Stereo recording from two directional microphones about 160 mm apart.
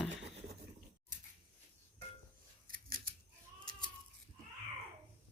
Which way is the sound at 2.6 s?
60° right (ahead or behind).